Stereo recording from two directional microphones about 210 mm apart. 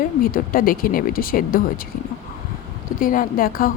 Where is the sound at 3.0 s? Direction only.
40° left (ahead or behind).